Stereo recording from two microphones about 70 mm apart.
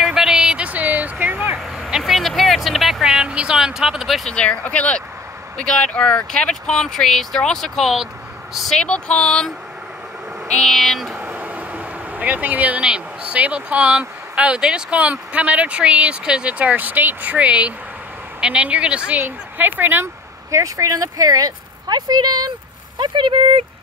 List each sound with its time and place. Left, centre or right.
0.0 s vehicle: centre; by 1.6 s right
1.8 s vehicle: centre
4.3 s speech: centre
8.7 s speech: centre
10.6 s speech: centre
11.2 s speech: right
19.2 s speech: right
20.5 s speech: right